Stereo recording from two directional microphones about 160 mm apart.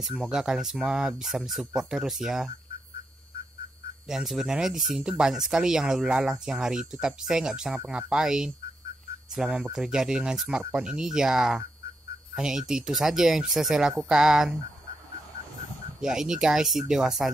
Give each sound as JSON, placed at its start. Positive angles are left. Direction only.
{"t": 0.0, "sound": "speech", "side_deg": -5}
{"t": 4.1, "sound": "speech", "side_deg": 0}
{"t": 16.0, "sound": "speech", "side_deg": -5}